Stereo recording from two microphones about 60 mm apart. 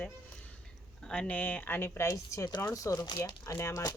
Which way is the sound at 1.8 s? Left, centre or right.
Left.